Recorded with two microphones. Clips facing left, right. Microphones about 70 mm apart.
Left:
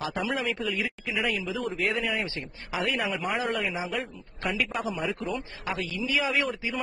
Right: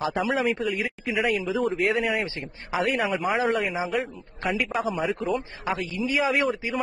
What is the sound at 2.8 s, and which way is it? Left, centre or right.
Speech, right.